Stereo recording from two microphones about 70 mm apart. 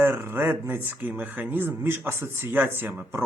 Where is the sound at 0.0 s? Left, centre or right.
Right.